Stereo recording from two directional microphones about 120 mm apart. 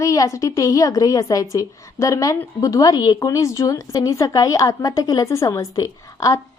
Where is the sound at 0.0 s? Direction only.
25° left (ahead or behind).